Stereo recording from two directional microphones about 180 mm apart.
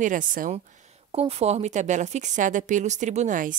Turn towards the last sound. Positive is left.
turn(degrees=-45)  # may be behind; listen again after turning